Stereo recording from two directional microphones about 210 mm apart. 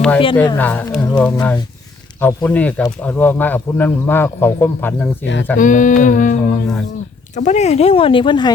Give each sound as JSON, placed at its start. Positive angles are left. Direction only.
{"t": 0.3, "sound": "speech", "side_deg": 10}
{"t": 5.2, "sound": "speech", "side_deg": 60}
{"t": 5.5, "sound": "a sound", "side_deg": 40}
{"t": 7.3, "sound": "speech", "side_deg": 35}